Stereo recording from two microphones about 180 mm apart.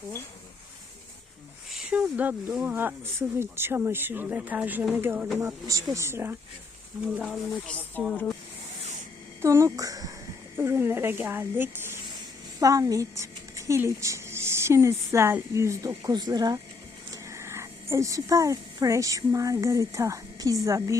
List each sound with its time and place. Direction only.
1.7 s speech: 5° right (ahead or behind)
7.5 s speech: 5° left (ahead or behind)
9.4 s a woman's voice: 15° right (ahead or behind)